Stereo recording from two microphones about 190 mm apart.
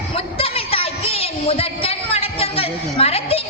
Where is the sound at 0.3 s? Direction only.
30° left (ahead or behind).